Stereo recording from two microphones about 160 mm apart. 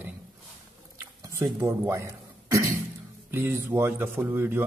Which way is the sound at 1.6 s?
20° right (ahead or behind).